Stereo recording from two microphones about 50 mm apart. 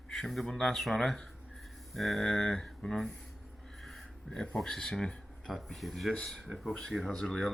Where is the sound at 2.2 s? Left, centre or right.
Centre.